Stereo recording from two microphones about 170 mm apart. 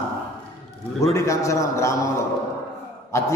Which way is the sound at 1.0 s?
15° left (ahead or behind).